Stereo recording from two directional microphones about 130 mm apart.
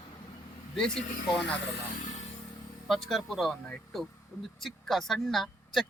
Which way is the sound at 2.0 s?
65° left (ahead or behind).